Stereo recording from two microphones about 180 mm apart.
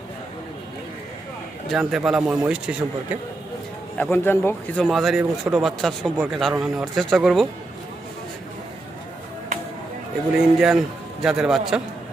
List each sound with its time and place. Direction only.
1.7 s speech: centre (ahead or behind)
3.9 s speech: 10° left (ahead or behind)
10.3 s speech: 5° right (ahead or behind)